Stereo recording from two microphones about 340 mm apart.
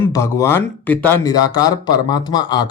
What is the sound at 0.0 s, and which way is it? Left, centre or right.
Speech, centre.